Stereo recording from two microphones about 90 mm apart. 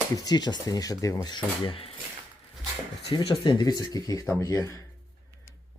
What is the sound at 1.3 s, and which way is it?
Speech, 85° left.